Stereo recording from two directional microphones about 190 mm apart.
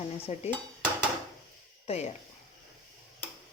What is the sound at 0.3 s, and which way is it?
Speech, 35° left (ahead or behind).